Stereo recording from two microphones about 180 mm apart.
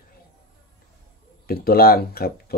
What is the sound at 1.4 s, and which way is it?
Speech, 60° left (ahead or behind).